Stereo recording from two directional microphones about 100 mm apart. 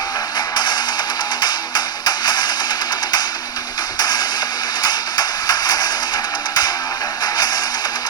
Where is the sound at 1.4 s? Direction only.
45° left (ahead or behind).